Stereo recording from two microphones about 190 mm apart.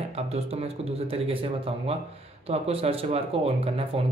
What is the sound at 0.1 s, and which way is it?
Speech, 35° right (ahead or behind).